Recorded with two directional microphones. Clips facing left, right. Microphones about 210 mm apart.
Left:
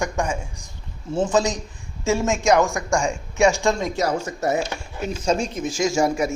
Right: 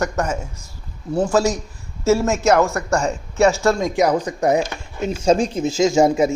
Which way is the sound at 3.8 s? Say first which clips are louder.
Right 5 dB; 15° right (ahead or behind).